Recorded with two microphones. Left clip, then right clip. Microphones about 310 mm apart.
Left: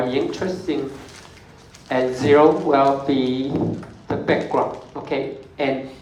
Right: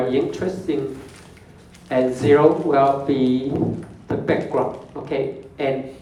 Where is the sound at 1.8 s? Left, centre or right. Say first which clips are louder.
Right 1 dB; centre.